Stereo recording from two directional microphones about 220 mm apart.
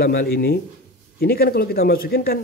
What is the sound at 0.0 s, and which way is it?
Speech, 45° left (ahead or behind).